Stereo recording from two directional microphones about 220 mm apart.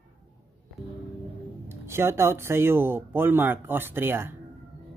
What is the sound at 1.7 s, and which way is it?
Speech, 10° right (ahead or behind).